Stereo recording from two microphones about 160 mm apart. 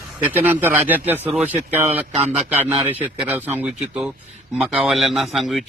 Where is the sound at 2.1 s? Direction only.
40° right (ahead or behind).